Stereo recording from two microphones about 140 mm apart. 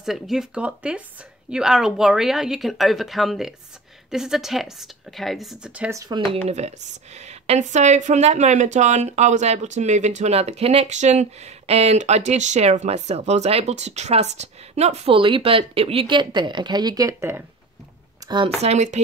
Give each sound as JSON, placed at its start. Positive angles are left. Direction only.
{"t": 0.0, "sound": "speech", "side_deg": 0}
{"t": 5.9, "sound": "speech", "side_deg": -20}
{"t": 6.3, "sound": "speech", "side_deg": -50}
{"t": 18.2, "sound": "a sound", "side_deg": -25}
{"t": 18.6, "sound": "speech", "side_deg": -55}